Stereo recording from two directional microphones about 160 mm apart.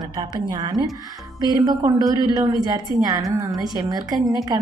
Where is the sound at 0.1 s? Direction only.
30° right (ahead or behind).